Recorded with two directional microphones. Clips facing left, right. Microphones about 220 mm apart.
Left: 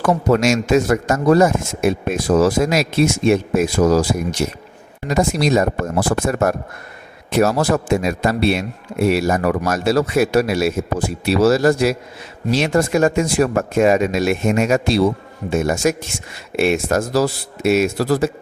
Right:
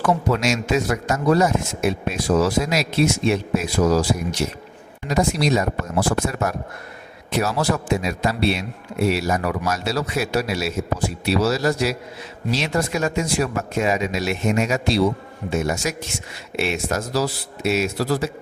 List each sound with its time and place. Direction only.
0.0 s a man's voice: 45° left (ahead or behind)